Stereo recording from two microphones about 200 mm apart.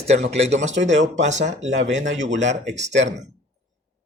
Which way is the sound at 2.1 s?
35° right (ahead or behind).